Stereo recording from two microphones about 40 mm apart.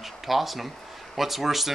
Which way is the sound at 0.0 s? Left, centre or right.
Centre.